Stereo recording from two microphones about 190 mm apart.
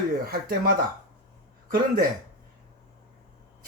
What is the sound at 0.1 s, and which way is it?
Speech, 50° right (ahead or behind).